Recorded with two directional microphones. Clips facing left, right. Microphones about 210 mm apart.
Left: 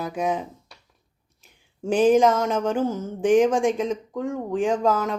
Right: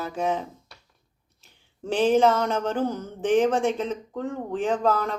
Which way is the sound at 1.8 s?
10° left (ahead or behind).